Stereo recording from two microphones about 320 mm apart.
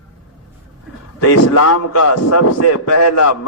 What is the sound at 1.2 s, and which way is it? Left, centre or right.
A man's voice, left.